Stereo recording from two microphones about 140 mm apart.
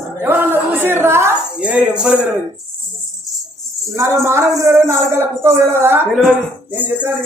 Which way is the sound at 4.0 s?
20° right (ahead or behind).